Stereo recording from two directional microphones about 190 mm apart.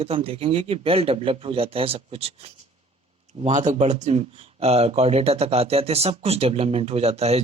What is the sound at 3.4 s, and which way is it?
Speech, 40° right (ahead or behind).